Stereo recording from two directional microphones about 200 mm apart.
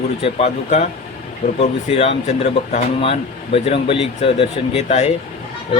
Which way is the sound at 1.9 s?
30° left (ahead or behind).